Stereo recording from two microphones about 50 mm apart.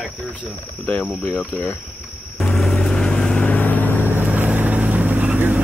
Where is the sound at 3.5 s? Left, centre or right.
Left.